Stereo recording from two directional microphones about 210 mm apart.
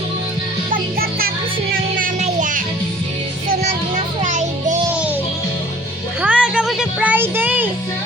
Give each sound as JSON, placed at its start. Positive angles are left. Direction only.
{"t": 0.7, "sound": "music", "side_deg": -45}
{"t": 4.2, "sound": "music", "side_deg": -35}
{"t": 4.9, "sound": "music", "side_deg": -5}
{"t": 6.2, "sound": "music", "side_deg": -5}